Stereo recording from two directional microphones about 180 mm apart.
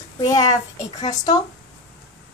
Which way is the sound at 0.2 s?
20° left (ahead or behind).